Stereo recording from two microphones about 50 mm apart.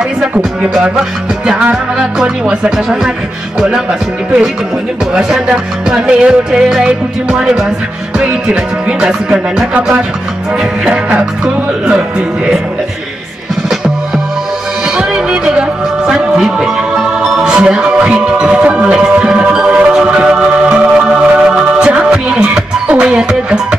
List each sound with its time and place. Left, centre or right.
0.4 s music: centre
5.1 s music: centre
9.0 s music: centre
13.7 s music: centre